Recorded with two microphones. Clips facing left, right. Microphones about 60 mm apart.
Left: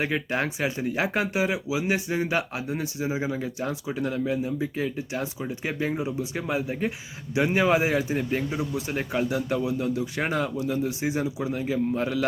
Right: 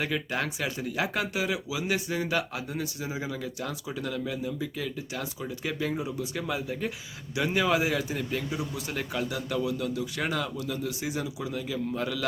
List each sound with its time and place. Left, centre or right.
0.0 s a man's voice: left